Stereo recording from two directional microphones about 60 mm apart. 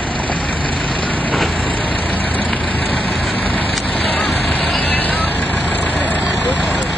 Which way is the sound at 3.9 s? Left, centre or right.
Left.